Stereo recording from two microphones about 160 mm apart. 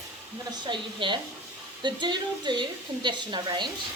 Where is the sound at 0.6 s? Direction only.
30° right (ahead or behind).